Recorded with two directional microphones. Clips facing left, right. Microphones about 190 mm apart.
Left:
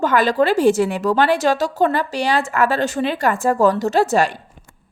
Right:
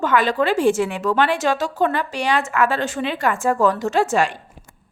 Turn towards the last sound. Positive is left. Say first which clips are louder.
# left 2 dB
turn(degrees=35)  # may be behind; listen again after turning